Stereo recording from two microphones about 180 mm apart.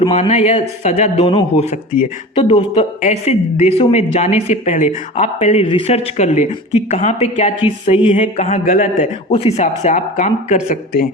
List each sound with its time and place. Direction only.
0.0 s speech: 30° left (ahead or behind)
0.3 s speech: 40° left (ahead or behind)
2.3 s speech: 30° left (ahead or behind); by 9.0 s 50° left (ahead or behind)
9.3 s speech: 35° left (ahead or behind); by 11.1 s 50° left (ahead or behind)